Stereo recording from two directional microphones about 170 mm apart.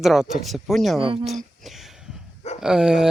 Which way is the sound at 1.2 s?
Centre (ahead or behind).